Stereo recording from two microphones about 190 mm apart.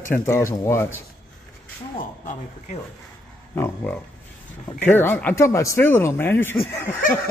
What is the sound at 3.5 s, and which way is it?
A woman's voice, 15° left (ahead or behind).